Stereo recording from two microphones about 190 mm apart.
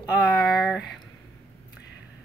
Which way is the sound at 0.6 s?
Centre (ahead or behind).